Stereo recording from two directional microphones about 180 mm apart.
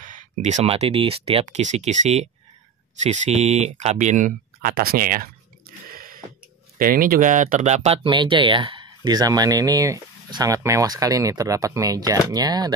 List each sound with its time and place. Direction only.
0.0 s speech: 45° right (ahead or behind)
5.9 s a sound: 55° right (ahead or behind)
6.8 s speech: 50° right (ahead or behind); by 12.7 s 20° right (ahead or behind)